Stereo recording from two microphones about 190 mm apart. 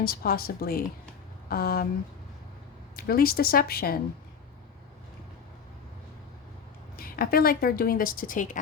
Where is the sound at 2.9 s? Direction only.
50° left (ahead or behind).